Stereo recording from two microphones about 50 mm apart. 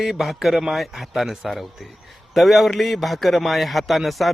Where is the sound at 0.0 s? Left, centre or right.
Centre.